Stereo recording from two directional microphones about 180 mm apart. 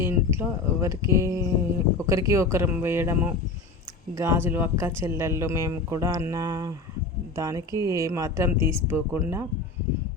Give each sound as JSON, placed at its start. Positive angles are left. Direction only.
{"t": 0.0, "sound": "speech", "side_deg": -15}